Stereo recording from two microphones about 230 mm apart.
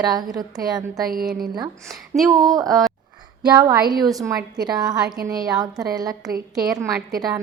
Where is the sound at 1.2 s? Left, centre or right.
Centre.